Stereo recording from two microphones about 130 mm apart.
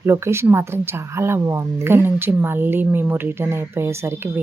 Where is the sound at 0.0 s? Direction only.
20° right (ahead or behind).